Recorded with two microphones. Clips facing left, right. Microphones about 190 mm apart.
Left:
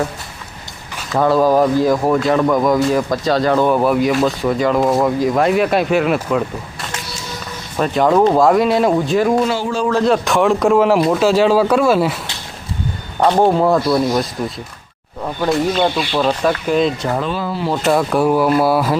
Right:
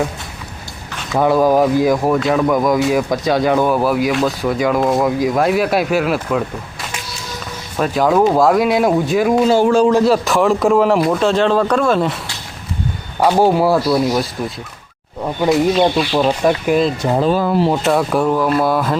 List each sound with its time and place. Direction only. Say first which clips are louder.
1.2 s speech: even; 15° right (ahead or behind)
2.0 s speech: even; centre (ahead or behind)
9.5 s a man's voice: right 7 dB; 50° right (ahead or behind)
9.9 s speech: right 1 dB; 5° right (ahead or behind)
13.1 s speech: even; 5° right (ahead or behind)
16.2 s speech: even; 15° right (ahead or behind)
17.2 s speech: right 6 dB; 40° right (ahead or behind)
17.8 s speech: left 1 dB; centre (ahead or behind)